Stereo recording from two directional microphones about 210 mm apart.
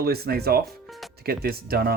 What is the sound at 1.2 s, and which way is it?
Speech, 45° right (ahead or behind).